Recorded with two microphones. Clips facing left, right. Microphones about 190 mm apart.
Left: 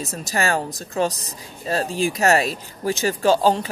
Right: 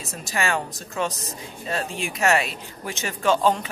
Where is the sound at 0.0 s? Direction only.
40° left (ahead or behind).